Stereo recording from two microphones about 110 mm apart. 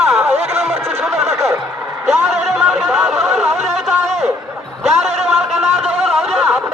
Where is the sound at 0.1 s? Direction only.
20° right (ahead or behind).